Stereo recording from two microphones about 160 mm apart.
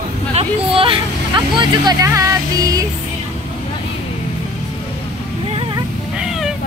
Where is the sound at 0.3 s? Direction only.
35° right (ahead or behind).